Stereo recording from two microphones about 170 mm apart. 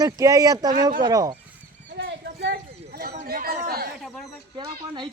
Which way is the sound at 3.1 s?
55° right (ahead or behind).